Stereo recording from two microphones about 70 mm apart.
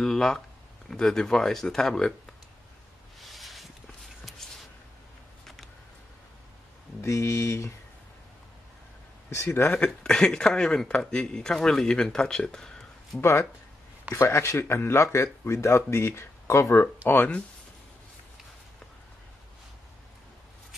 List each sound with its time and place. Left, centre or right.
0.0 s speech: centre
3.2 s a sound: centre
7.0 s speech: left
9.3 s speech: left
9.8 s speech: centre
13.2 s speech: left
16.8 s speech: left